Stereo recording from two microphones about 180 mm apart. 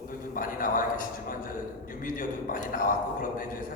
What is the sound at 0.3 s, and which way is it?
A man's voice, 50° left (ahead or behind).